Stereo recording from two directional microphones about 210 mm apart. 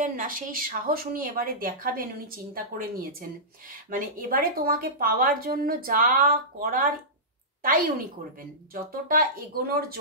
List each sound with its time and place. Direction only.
0.0 s a woman's voice: 40° right (ahead or behind)